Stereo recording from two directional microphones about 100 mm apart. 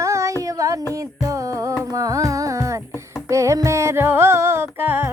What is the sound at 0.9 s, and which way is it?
Speech, 30° right (ahead or behind).